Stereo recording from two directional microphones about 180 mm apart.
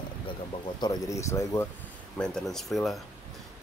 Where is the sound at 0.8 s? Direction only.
20° left (ahead or behind).